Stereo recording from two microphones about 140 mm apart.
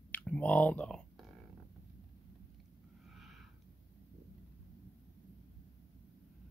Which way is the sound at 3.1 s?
Centre (ahead or behind).